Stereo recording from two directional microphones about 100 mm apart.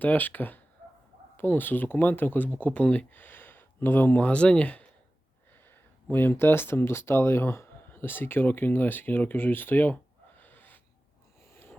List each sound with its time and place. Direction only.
0.0 s speech: 15° left (ahead or behind)
6.1 s speech: 20° left (ahead or behind)
11.5 s a sound: 20° left (ahead or behind)